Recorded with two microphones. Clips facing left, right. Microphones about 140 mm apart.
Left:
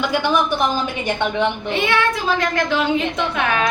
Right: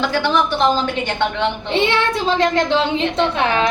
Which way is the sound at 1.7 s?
25° right (ahead or behind).